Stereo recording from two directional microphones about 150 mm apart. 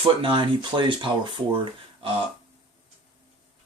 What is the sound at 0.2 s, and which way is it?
Speech, 35° right (ahead or behind).